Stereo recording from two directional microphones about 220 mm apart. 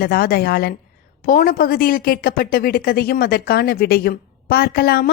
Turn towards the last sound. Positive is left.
turn(degrees=45)  # may be behind; listen again after turning